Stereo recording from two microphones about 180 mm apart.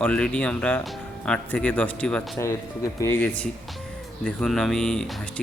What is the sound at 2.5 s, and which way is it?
A man's voice, 15° left (ahead or behind).